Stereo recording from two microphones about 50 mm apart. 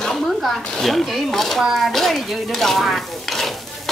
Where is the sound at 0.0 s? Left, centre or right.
Centre.